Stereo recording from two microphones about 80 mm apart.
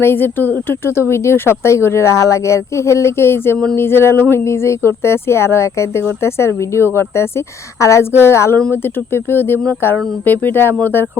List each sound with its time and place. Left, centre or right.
0.0 s speech: left